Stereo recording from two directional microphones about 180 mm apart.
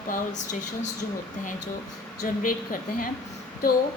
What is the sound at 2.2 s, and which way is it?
Speech, 50° left (ahead or behind).